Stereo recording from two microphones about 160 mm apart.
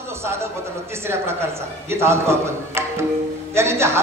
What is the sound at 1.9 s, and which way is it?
A man's voice, 15° right (ahead or behind).